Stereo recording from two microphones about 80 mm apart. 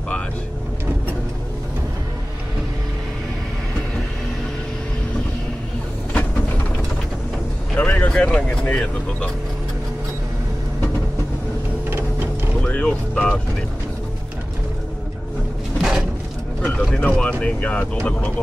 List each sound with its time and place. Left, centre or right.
7.7 s speech: centre
12.6 s music: centre
15.8 s a sound: centre
16.9 s speech: centre